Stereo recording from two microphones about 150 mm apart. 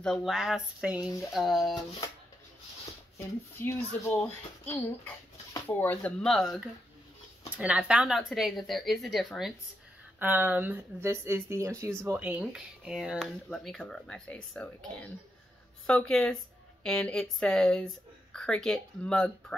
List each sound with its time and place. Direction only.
0.0 s speech: centre (ahead or behind)
3.6 s a child's voice: 15° left (ahead or behind)
6.2 s speech: centre (ahead or behind)
10.1 s speech: 10° right (ahead or behind); by 19.3 s 5° left (ahead or behind)